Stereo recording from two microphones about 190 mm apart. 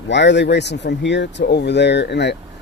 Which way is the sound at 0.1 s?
65° left (ahead or behind).